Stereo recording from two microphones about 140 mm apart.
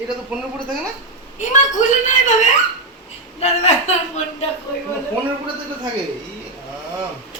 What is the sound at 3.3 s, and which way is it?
A woman's voice, 50° left (ahead or behind).